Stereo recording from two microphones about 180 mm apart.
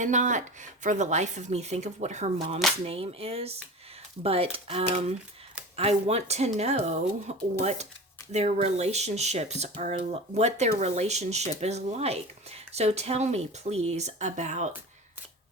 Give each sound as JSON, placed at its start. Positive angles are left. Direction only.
{"t": 0.0, "sound": "speech", "side_deg": -45}